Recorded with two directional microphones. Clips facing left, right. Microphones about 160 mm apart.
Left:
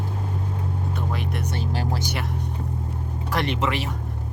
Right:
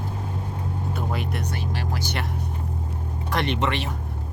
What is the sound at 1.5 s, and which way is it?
Music, 30° left (ahead or behind).